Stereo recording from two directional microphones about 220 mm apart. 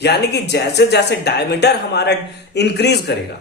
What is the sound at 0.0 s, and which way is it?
Speech, 50° left (ahead or behind).